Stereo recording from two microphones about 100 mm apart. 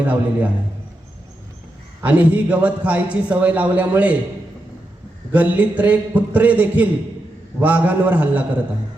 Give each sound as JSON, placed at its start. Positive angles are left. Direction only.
{"t": 0.0, "sound": "a man's voice", "side_deg": -15}
{"t": 2.0, "sound": "a man's voice", "side_deg": -15}
{"t": 5.3, "sound": "a man's voice", "side_deg": -15}